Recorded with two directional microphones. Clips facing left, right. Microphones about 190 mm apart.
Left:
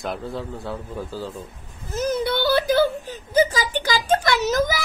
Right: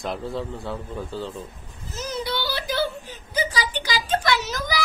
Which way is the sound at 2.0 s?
55° left (ahead or behind).